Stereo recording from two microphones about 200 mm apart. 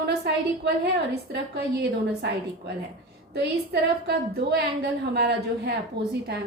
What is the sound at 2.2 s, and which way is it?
A woman's voice, 55° right (ahead or behind).